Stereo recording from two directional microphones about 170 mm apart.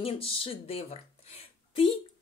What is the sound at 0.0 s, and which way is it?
A woman's voice, 35° left (ahead or behind).